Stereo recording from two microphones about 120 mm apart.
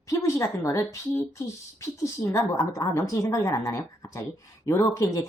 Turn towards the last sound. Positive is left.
turn(degrees=25)  # may be behind; listen again after turning